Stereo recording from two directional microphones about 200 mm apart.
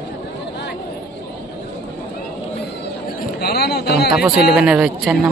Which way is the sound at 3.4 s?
50° left (ahead or behind).